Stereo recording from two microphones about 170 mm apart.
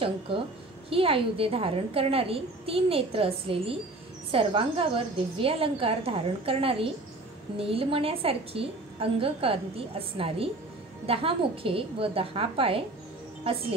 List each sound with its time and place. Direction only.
0.8 s a woman's voice: 35° right (ahead or behind)